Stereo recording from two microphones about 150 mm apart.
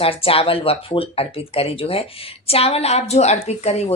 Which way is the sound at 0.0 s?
40° left (ahead or behind).